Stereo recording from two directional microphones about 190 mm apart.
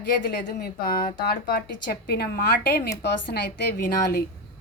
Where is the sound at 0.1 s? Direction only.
55° left (ahead or behind).